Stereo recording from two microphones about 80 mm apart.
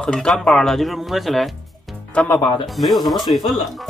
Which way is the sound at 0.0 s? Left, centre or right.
Centre.